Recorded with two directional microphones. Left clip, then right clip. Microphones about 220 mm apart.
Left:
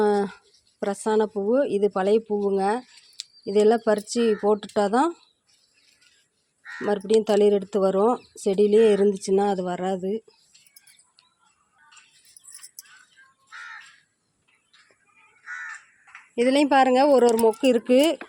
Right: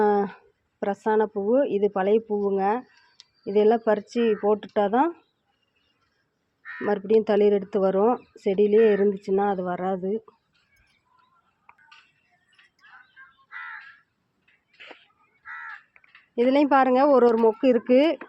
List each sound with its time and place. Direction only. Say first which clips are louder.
0.0 s a sound: even; 10° left (ahead or behind)
0.8 s a woman's voice: even; 10° left (ahead or behind)
6.8 s a woman's voice: even; 10° left (ahead or behind)
16.3 s a woman's voice: even; 10° left (ahead or behind)